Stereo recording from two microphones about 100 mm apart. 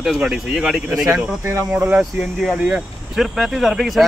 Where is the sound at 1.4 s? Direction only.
25° right (ahead or behind).